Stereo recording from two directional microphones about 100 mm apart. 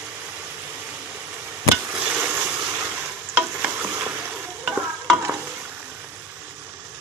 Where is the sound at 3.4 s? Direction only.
15° right (ahead or behind).